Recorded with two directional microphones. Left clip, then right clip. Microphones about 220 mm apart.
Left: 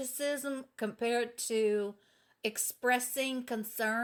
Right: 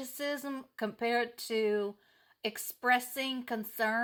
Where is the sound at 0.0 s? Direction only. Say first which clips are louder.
Left 2 dB; 15° right (ahead or behind).